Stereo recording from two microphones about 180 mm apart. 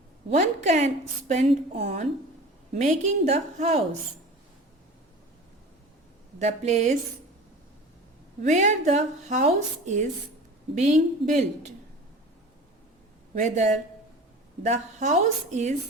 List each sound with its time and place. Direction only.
0.3 s speech: 40° right (ahead or behind)
6.4 s speech: 40° right (ahead or behind)
8.4 s speech: 40° right (ahead or behind)
13.3 s speech: 40° right (ahead or behind)